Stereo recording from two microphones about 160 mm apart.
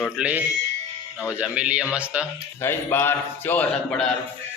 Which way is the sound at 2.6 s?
15° left (ahead or behind).